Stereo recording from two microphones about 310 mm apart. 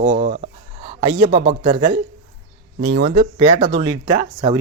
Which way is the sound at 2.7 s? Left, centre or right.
Right.